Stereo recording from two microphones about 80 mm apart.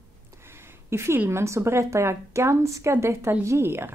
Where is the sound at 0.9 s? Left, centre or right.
Right.